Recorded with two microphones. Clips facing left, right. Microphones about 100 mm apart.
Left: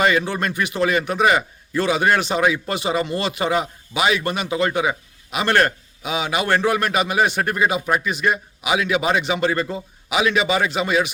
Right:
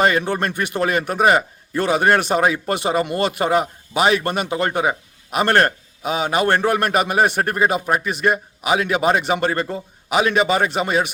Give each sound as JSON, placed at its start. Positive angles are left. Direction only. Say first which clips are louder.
{"t": 0.0, "sound": "a man's voice", "louder": "right 1 dB", "side_deg": -45}